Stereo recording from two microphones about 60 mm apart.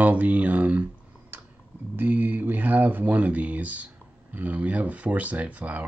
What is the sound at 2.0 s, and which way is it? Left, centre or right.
Speech, right.